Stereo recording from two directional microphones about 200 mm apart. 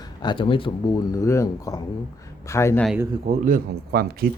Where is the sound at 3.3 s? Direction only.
40° right (ahead or behind).